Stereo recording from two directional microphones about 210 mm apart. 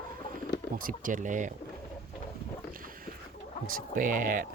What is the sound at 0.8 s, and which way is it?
Speech, 40° right (ahead or behind).